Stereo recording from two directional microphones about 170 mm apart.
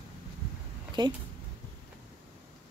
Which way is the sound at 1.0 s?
25° right (ahead or behind).